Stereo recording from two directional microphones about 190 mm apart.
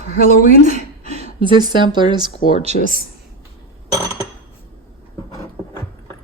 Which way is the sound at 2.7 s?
35° right (ahead or behind).